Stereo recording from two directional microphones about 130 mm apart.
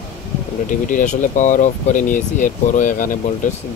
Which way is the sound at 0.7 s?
85° left.